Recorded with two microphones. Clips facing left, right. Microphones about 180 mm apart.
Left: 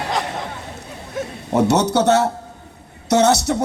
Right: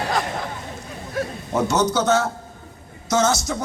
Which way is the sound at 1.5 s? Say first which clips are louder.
Left 4 dB; 65° left (ahead or behind).